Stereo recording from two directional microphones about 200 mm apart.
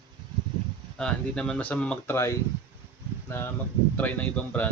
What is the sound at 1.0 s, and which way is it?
Speech, 5° left (ahead or behind).